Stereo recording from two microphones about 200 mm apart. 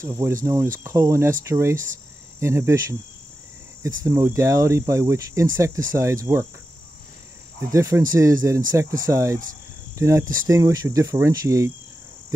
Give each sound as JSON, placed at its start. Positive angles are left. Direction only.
{"t": 0.0, "sound": "speech", "side_deg": -15}
{"t": 7.7, "sound": "speech", "side_deg": -15}